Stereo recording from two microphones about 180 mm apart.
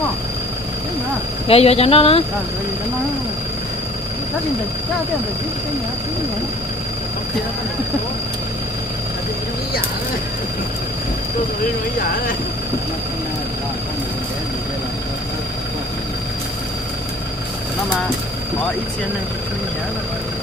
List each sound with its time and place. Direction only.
1.5 s speech: 35° left (ahead or behind)